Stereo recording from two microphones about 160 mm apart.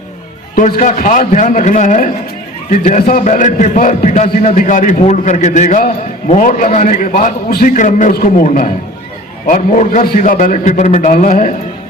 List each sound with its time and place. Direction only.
0.5 s a man's voice: 50° left (ahead or behind)